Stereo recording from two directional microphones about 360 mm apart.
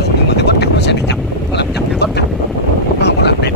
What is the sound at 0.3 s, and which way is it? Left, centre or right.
Vehicle, left.